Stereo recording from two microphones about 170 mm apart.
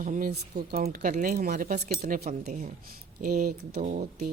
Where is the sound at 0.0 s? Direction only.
50° right (ahead or behind).